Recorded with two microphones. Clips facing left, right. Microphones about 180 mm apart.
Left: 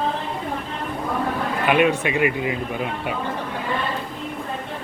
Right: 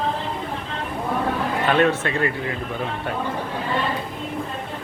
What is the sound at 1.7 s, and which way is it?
Speech, 10° left (ahead or behind).